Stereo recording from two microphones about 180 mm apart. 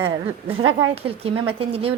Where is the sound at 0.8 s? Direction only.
30° right (ahead or behind).